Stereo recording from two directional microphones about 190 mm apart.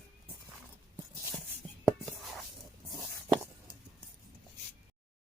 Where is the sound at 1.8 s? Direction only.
Centre (ahead or behind).